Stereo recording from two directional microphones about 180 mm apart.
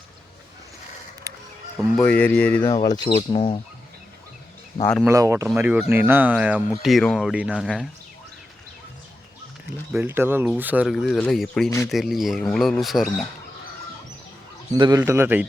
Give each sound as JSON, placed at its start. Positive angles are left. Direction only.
{"t": 1.3, "sound": "music", "side_deg": -20}
{"t": 1.8, "sound": "speech", "side_deg": 5}
{"t": 2.8, "sound": "speech", "side_deg": 20}
{"t": 3.3, "sound": "speech", "side_deg": 40}
{"t": 5.0, "sound": "speech", "side_deg": -15}
{"t": 9.9, "sound": "speech", "side_deg": -10}
{"t": 14.8, "sound": "speech", "side_deg": -20}